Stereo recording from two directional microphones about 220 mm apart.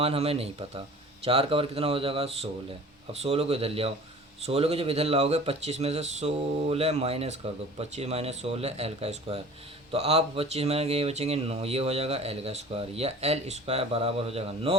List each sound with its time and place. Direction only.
0.0 s speech: 25° right (ahead or behind)